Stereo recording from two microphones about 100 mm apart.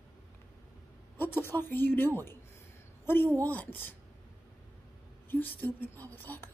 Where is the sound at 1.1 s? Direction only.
20° left (ahead or behind).